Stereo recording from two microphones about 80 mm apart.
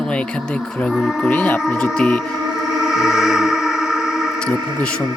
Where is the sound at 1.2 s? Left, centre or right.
Left.